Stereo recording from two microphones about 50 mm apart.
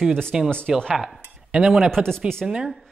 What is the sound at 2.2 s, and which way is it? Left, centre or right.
Speech, centre.